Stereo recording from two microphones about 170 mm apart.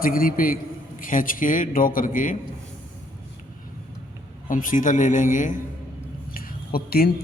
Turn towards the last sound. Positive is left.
turn(degrees=60)  # may be behind; listen again after turning